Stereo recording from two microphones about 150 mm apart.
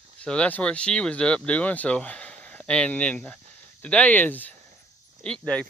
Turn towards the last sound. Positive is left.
turn(degrees=5)  # may be behind; listen again after turning